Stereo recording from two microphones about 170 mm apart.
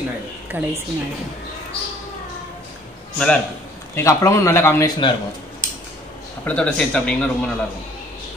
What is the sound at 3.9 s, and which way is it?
Speech, 15° left (ahead or behind).